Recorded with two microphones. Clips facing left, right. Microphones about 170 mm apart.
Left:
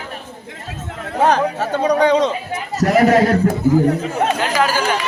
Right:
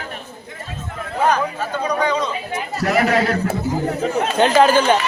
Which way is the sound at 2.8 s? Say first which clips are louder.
Left 5 dB; 40° left (ahead or behind).